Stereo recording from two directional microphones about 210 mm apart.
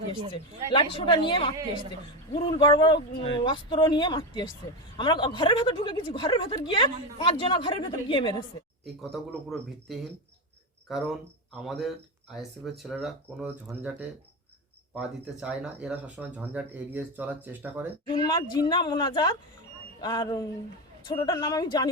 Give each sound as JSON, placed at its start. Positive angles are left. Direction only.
{"t": 0.3, "sound": "a woman's voice", "side_deg": 25}
{"t": 9.1, "sound": "speech", "side_deg": 0}
{"t": 14.9, "sound": "speech", "side_deg": -5}
{"t": 18.0, "sound": "a woman's voice", "side_deg": 20}